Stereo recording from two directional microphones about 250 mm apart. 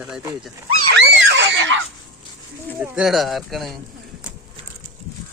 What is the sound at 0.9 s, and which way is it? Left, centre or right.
Screaming, right.